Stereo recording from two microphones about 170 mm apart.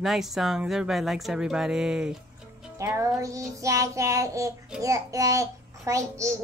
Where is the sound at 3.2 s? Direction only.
20° right (ahead or behind).